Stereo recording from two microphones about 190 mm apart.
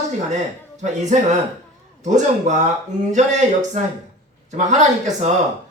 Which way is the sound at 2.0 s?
40° right (ahead or behind).